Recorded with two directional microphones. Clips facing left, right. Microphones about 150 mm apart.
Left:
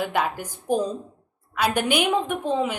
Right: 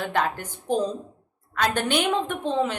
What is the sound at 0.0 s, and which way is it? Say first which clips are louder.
A woman's voice: left 1 dB; 10° left (ahead or behind).